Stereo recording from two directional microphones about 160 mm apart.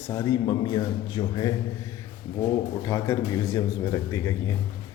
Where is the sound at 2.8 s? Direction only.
20° left (ahead or behind).